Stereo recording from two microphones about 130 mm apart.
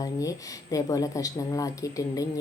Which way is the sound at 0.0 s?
25° left (ahead or behind).